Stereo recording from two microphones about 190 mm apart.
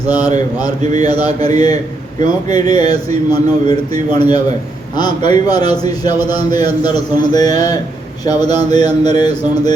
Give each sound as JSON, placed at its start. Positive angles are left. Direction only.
{"t": 0.0, "sound": "a man's voice", "side_deg": 20}